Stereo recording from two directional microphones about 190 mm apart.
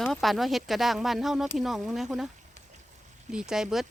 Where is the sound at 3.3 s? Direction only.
5° right (ahead or behind).